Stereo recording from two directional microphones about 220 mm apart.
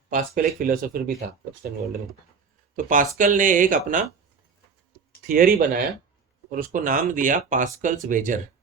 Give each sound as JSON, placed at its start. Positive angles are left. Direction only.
{"t": 0.1, "sound": "speech", "side_deg": -40}
{"t": 2.7, "sound": "speech", "side_deg": -35}
{"t": 5.2, "sound": "speech", "side_deg": -40}